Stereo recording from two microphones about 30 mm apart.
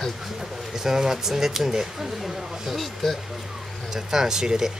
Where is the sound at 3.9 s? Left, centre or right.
Centre.